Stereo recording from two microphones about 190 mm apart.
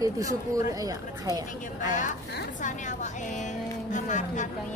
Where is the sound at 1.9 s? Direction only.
40° left (ahead or behind).